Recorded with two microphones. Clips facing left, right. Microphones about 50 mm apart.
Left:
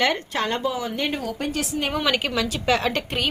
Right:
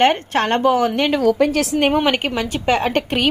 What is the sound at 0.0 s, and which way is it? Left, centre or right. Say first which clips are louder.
A woman's voice: right 7 dB; right.